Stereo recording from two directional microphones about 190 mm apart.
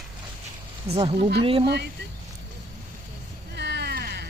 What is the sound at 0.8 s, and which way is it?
Speech, 30° right (ahead or behind).